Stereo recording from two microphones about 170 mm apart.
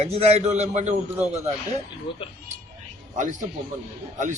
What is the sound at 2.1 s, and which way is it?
Speech, 30° left (ahead or behind).